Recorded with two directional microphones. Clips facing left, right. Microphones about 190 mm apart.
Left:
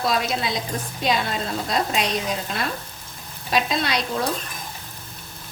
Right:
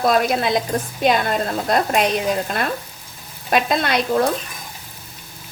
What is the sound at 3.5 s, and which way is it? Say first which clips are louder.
Frying: right 4 dB; 55° right (ahead or behind).